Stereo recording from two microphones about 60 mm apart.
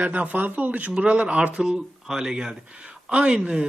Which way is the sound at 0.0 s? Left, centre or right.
Right.